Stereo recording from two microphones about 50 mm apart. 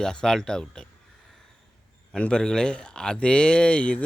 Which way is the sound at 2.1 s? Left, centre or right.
Centre.